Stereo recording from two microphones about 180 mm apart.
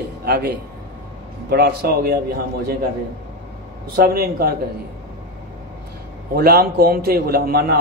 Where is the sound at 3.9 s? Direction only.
60° right (ahead or behind).